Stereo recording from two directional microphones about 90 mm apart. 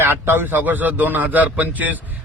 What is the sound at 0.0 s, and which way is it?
A man's voice, 25° right (ahead or behind).